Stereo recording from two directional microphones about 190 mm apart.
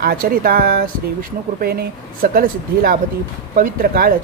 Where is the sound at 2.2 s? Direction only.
50° right (ahead or behind).